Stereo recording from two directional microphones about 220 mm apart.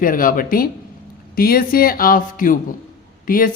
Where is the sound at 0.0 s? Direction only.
40° left (ahead or behind).